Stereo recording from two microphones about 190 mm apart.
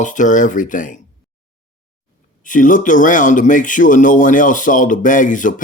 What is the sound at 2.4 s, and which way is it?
A man's voice, 45° left (ahead or behind).